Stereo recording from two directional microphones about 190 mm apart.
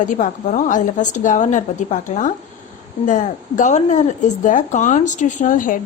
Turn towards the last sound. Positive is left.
turn(degrees=45)  # may be behind; listen again after turning